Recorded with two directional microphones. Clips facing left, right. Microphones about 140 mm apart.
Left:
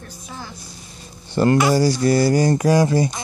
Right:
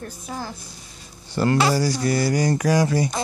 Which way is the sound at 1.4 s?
35° left (ahead or behind).